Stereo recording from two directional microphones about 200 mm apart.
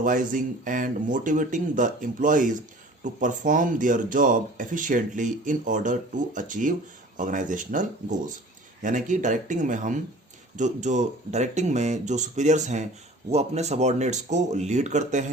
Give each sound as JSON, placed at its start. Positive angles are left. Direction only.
{"t": 0.0, "sound": "speech", "side_deg": -40}